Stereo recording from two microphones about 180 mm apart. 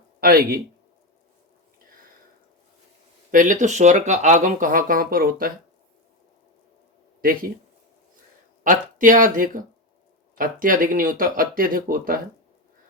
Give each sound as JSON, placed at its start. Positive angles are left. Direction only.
{"t": 0.2, "sound": "speech", "side_deg": -55}
{"t": 3.3, "sound": "speech", "side_deg": -45}
{"t": 8.6, "sound": "speech", "side_deg": -50}